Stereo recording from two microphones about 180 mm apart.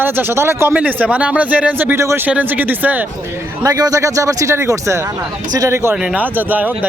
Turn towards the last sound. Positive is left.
turn(degrees=-10)  # may be behind; listen again after turning